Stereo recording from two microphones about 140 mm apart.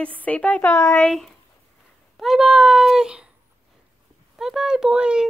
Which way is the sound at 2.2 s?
Centre (ahead or behind).